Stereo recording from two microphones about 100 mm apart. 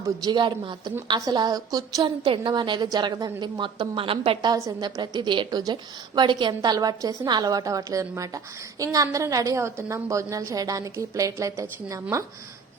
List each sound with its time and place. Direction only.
0.2 s a woman's voice: 45° right (ahead or behind)
2.0 s a woman's voice: 55° right (ahead or behind)
4.4 s a woman's voice: 40° right (ahead or behind)